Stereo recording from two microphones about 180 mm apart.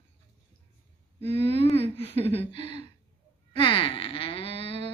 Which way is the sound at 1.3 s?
30° left (ahead or behind).